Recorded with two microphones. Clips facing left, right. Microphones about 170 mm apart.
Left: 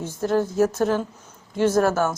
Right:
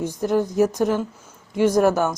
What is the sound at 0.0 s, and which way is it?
A woman's voice, 15° right (ahead or behind).